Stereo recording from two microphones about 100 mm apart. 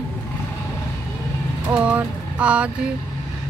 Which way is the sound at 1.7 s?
15° right (ahead or behind).